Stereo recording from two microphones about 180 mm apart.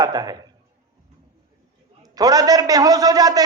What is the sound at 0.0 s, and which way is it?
Speech, 20° right (ahead or behind).